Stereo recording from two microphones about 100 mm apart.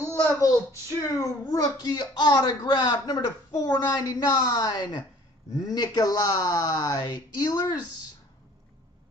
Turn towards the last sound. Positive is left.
turn(degrees=40)  # may be behind; listen again after turning